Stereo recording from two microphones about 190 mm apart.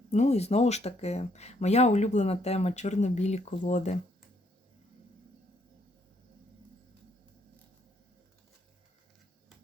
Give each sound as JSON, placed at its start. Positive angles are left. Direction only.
{"t": 0.1, "sound": "speech", "side_deg": 35}